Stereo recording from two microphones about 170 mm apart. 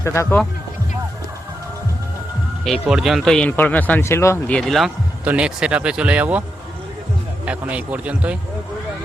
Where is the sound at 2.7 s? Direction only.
Centre (ahead or behind); by 4.5 s 15° left (ahead or behind).